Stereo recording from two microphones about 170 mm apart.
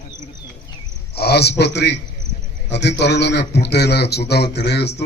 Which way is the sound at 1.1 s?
70° left (ahead or behind).